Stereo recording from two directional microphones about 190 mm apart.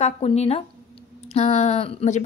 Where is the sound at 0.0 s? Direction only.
35° left (ahead or behind).